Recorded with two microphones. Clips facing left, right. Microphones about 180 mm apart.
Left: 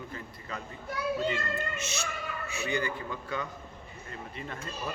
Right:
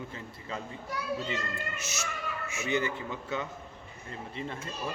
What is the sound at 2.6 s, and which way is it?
Speech, 25° right (ahead or behind).